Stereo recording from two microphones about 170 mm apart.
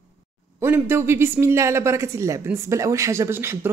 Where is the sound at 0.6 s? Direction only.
15° right (ahead or behind).